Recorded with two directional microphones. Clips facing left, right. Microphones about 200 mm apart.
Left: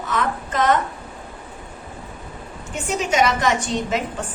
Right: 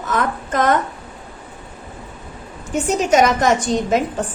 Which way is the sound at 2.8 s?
45° right (ahead or behind).